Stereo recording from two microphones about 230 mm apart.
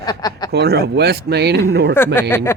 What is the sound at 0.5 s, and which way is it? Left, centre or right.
Speech, right.